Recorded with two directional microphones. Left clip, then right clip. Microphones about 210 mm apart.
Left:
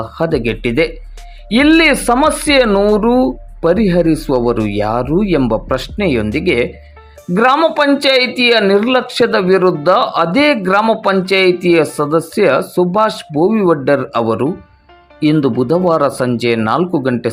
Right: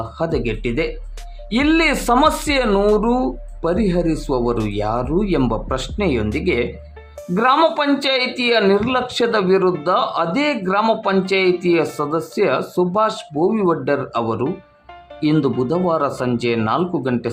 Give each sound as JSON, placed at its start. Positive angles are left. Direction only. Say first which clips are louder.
{"t": 0.0, "sound": "speech", "louder": "left 5 dB", "side_deg": 15}